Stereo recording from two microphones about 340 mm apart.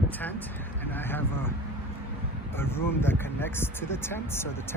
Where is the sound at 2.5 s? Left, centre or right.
Centre.